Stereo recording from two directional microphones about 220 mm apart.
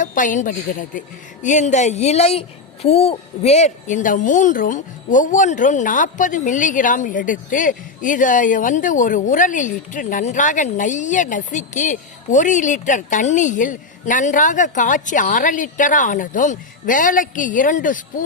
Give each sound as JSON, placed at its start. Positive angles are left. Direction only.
{"t": 0.0, "sound": "speech", "side_deg": 35}